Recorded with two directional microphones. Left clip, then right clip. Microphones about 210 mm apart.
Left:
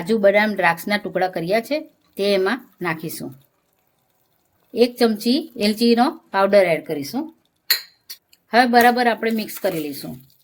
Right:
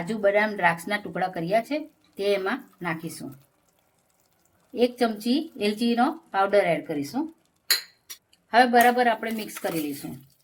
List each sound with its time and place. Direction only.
0.0 s speech: 45° left (ahead or behind)
4.7 s speech: 45° left (ahead or behind)
8.4 s speech: 40° left (ahead or behind)